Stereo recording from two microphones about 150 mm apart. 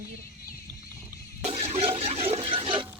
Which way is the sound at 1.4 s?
45° right (ahead or behind).